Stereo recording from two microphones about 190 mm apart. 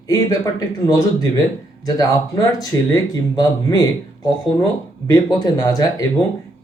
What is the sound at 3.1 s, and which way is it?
Speech, 20° left (ahead or behind).